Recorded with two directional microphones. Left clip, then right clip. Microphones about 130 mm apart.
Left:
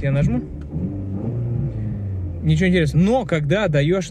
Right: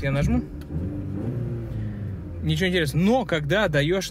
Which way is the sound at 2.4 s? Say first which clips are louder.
Left 4 dB; 25° right (ahead or behind).